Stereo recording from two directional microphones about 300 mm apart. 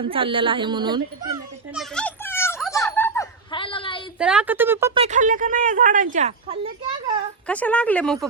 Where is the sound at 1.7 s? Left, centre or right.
Centre.